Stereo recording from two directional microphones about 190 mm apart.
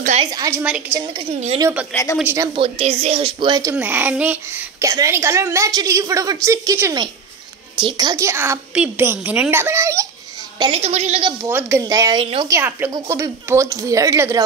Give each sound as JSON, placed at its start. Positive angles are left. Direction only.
{"t": 0.0, "sound": "a woman's voice", "side_deg": -35}
{"t": 0.3, "sound": "speech", "side_deg": -15}
{"t": 0.9, "sound": "a woman's voice", "side_deg": -30}
{"t": 1.6, "sound": "speech", "side_deg": -10}
{"t": 2.3, "sound": "speech", "side_deg": -25}
{"t": 3.7, "sound": "speech", "side_deg": -10}
{"t": 10.6, "sound": "a woman's voice", "side_deg": -30}
{"t": 11.5, "sound": "speech", "side_deg": -15}